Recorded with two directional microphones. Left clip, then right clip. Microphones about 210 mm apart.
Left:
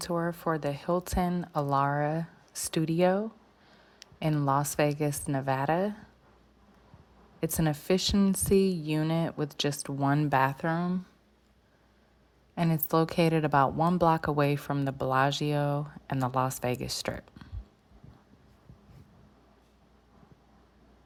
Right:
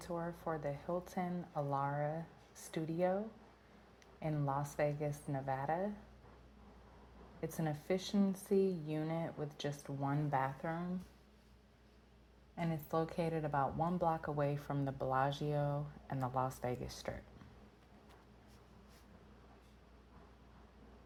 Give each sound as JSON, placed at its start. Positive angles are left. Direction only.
{"t": 0.0, "sound": "speech", "side_deg": 40}
{"t": 4.3, "sound": "speech", "side_deg": 40}
{"t": 4.9, "sound": "speech", "side_deg": 55}
{"t": 7.5, "sound": "speech", "side_deg": 40}
{"t": 12.5, "sound": "a woman's voice", "side_deg": 45}